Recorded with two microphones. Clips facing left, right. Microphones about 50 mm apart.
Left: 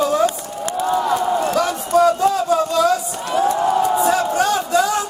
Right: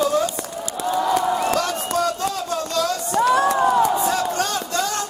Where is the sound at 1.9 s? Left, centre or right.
Centre.